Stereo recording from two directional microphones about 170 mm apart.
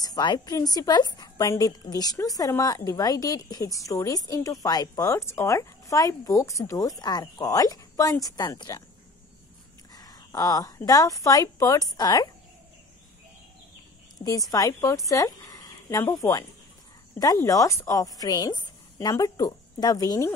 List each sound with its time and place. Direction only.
0.0 s a woman's voice: 25° left (ahead or behind)
9.9 s a sound: 20° left (ahead or behind)
10.9 s a woman's voice: 20° left (ahead or behind)
14.2 s a woman's voice: 20° left (ahead or behind)